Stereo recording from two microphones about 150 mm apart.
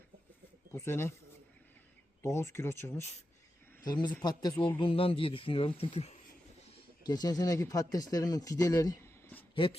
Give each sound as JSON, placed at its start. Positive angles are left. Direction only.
{"t": 0.7, "sound": "speech", "side_deg": 15}
{"t": 2.2, "sound": "speech", "side_deg": 15}
{"t": 3.8, "sound": "speech", "side_deg": 30}
{"t": 4.8, "sound": "speech", "side_deg": 35}
{"t": 7.1, "sound": "speech", "side_deg": 25}
{"t": 9.6, "sound": "speech", "side_deg": 35}